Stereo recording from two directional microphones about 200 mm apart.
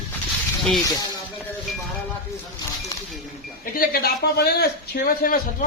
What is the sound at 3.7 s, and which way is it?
A man's voice, 50° left (ahead or behind).